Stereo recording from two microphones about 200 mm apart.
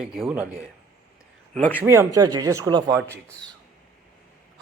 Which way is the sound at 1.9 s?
15° right (ahead or behind).